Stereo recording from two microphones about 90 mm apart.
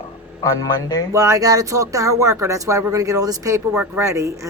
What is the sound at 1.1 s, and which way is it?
Speech, 35° right (ahead or behind).